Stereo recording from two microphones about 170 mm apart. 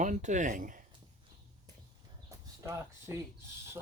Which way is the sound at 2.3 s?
20° right (ahead or behind).